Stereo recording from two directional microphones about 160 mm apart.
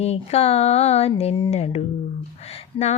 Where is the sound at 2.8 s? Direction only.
30° left (ahead or behind).